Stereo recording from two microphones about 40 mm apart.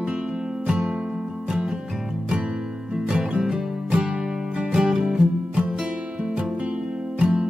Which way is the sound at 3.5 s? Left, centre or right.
Centre.